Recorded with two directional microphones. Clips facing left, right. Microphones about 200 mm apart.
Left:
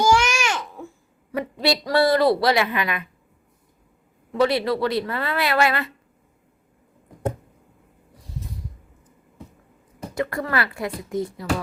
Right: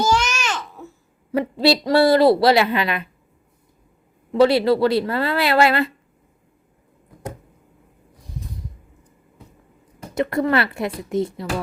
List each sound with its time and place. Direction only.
0.0 s babbling: 10° left (ahead or behind)
1.3 s speech: 30° right (ahead or behind)
4.3 s speech: 30° right (ahead or behind)
10.2 s speech: 25° right (ahead or behind)